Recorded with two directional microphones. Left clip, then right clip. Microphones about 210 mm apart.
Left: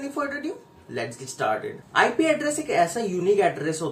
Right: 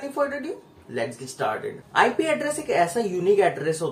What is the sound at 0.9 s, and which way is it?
Speech, 5° left (ahead or behind).